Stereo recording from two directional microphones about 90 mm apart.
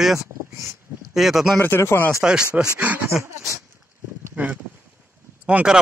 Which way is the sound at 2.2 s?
10° right (ahead or behind).